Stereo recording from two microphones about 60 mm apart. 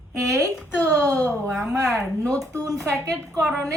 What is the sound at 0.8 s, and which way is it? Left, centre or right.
Speech, left.